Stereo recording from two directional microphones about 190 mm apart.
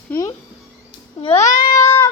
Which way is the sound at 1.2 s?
35° left (ahead or behind).